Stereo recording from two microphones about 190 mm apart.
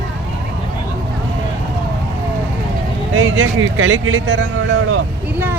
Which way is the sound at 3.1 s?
80° right.